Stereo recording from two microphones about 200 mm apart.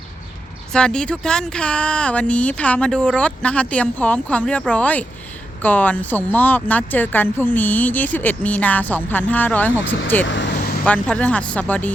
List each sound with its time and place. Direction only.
0.7 s speech: 5° left (ahead or behind)
10.2 s vehicle: 65° left (ahead or behind)
10.8 s speech: 5° left (ahead or behind)